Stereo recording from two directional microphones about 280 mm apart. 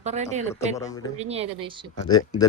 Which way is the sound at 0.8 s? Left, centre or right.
Centre.